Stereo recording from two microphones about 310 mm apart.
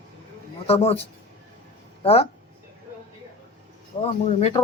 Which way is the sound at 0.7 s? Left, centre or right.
Centre.